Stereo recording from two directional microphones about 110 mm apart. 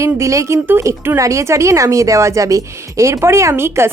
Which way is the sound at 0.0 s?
30° right (ahead or behind).